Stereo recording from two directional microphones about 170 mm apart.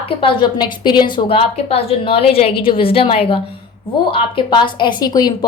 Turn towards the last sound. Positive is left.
turn(degrees=25)  # may be behind; listen again after turning